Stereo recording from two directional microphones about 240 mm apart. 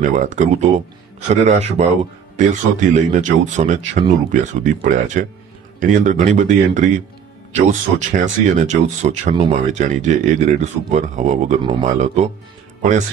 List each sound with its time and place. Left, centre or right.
0.0 s speech: right